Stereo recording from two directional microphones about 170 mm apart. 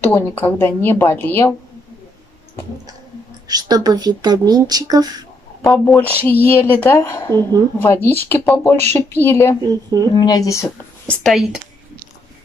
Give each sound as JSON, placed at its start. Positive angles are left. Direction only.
{"t": 0.0, "sound": "a woman's voice", "side_deg": 10}
{"t": 3.4, "sound": "speech", "side_deg": -20}
{"t": 5.6, "sound": "a woman's voice", "side_deg": 5}
{"t": 10.1, "sound": "speech", "side_deg": 25}
{"t": 11.1, "sound": "speech", "side_deg": 0}